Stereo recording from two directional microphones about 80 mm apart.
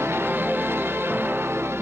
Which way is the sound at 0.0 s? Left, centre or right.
Right.